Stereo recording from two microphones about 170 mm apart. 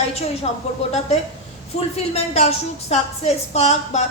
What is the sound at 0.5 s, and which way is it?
Speech, 40° left (ahead or behind).